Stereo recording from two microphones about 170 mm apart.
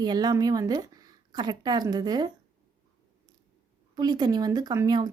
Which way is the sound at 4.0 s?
25° right (ahead or behind).